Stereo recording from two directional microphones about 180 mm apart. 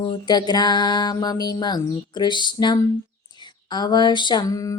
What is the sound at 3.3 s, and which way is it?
Speech, 25° left (ahead or behind).